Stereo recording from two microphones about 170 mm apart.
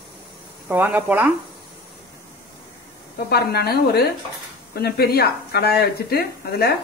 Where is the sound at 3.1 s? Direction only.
70° left (ahead or behind).